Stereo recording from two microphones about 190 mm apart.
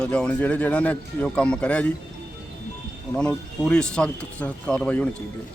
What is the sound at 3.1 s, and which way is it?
Speech, 5° left (ahead or behind).